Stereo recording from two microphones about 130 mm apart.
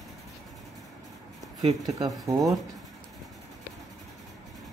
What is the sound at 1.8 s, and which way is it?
Speech, 25° right (ahead or behind).